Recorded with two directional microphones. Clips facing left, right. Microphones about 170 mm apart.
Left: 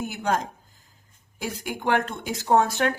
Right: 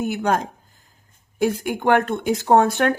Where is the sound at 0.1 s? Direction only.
60° right (ahead or behind).